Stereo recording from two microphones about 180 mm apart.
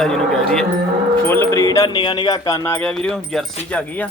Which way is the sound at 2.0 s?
25° left (ahead or behind).